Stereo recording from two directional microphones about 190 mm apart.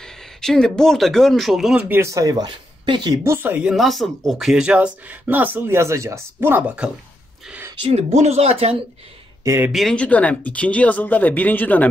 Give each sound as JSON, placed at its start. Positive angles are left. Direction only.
{"t": 0.4, "sound": "speech", "side_deg": 5}
{"t": 7.9, "sound": "speech", "side_deg": -35}
{"t": 9.4, "sound": "speech", "side_deg": -15}
{"t": 9.7, "sound": "speech", "side_deg": 0}